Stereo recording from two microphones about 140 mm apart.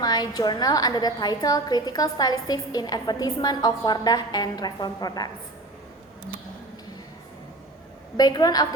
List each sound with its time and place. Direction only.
0.0 s a woman's voice: 30° left (ahead or behind)
8.1 s a woman's voice: 30° left (ahead or behind)